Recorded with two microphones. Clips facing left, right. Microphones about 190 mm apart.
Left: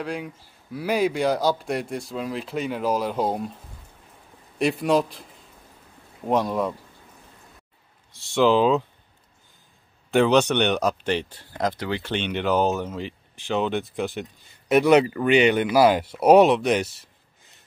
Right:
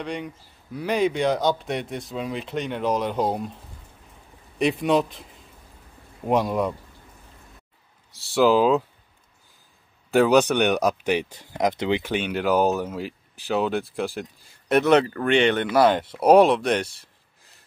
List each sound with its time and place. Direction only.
0.0 s a man's voice: 5° left (ahead or behind)
4.6 s a man's voice: centre (ahead or behind)
6.2 s a man's voice: centre (ahead or behind)
8.1 s speech: 35° right (ahead or behind)
8.4 s a man's voice: 5° right (ahead or behind)
10.1 s a man's voice: 5° right (ahead or behind)